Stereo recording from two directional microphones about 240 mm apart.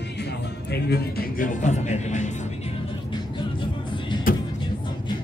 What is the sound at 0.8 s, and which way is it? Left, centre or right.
Speech, left.